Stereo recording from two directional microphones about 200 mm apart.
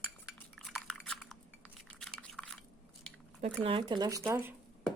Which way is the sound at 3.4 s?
25° right (ahead or behind).